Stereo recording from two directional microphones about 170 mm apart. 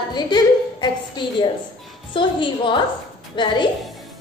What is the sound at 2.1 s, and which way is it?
A woman's voice, 30° left (ahead or behind).